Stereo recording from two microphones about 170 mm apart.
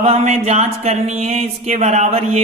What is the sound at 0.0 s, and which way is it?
Speech, 40° right (ahead or behind).